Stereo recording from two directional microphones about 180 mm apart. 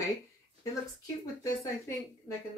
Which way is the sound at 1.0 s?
20° left (ahead or behind).